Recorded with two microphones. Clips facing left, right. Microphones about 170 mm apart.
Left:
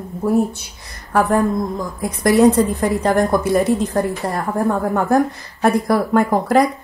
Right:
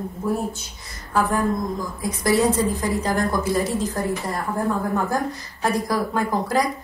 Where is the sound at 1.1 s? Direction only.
65° left (ahead or behind).